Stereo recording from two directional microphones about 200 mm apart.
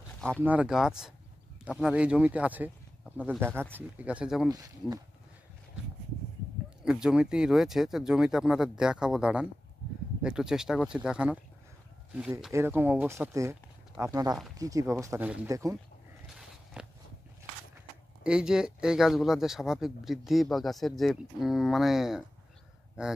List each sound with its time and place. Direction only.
0.4 s speech: 5° right (ahead or behind)
4.5 s speech: 20° right (ahead or behind)
6.8 s speech: 5° right (ahead or behind)
16.8 s a sound: 5° right (ahead or behind)
18.2 s speech: 5° right (ahead or behind)